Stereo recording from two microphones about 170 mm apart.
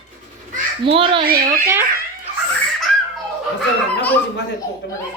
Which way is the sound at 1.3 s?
55° right (ahead or behind).